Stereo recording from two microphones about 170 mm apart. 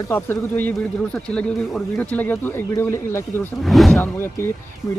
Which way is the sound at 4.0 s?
15° left (ahead or behind).